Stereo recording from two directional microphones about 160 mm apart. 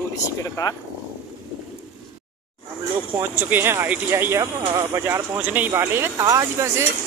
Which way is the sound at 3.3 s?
15° right (ahead or behind).